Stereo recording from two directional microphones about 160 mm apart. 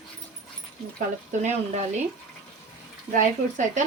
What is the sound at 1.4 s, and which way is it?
Speech, 45° right (ahead or behind).